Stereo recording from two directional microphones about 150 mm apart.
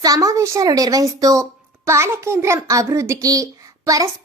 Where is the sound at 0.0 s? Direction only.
25° right (ahead or behind).